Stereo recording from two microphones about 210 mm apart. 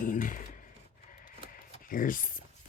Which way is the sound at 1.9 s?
40° left (ahead or behind).